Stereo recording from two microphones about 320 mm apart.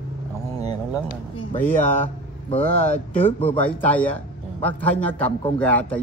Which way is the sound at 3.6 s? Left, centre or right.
Centre.